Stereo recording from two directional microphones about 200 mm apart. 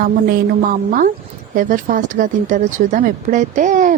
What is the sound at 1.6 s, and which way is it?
Speech, 40° right (ahead or behind).